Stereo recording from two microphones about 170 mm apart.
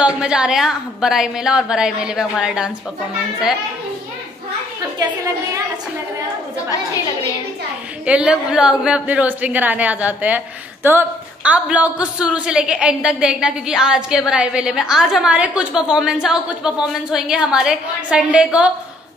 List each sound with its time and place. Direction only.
0.0 s a woman's voice: 5° right (ahead or behind)
4.9 s a woman's voice: 20° right (ahead or behind)
8.0 s a woman's voice: 5° right (ahead or behind)